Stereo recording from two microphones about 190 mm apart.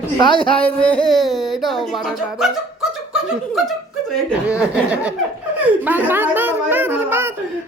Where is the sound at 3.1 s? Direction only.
5° right (ahead or behind).